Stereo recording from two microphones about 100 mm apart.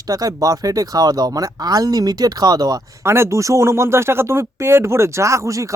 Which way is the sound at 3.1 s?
30° right (ahead or behind).